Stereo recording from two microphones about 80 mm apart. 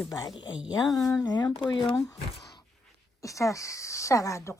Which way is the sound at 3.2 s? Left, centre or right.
Left.